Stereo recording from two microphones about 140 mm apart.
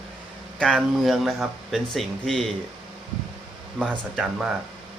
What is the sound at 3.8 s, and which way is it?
Speech, 5° left (ahead or behind).